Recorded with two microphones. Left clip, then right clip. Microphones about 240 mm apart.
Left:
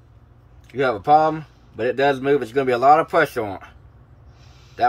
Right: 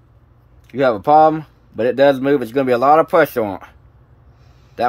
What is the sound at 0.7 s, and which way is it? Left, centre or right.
Speech, right.